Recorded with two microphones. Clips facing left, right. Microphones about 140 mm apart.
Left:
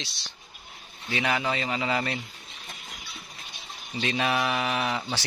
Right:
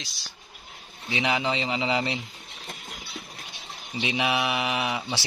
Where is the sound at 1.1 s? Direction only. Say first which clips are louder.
Right 1 dB; 15° right (ahead or behind).